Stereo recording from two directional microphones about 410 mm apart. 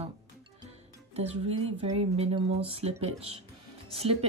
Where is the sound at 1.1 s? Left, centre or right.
Centre.